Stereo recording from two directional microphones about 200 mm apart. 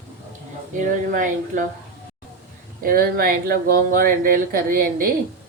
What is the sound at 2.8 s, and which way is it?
Speech, 45° right (ahead or behind).